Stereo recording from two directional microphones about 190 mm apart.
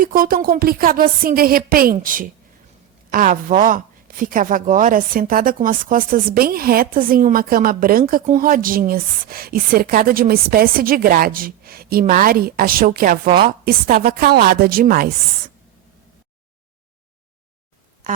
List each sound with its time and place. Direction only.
0.0 s speech: 50° right (ahead or behind)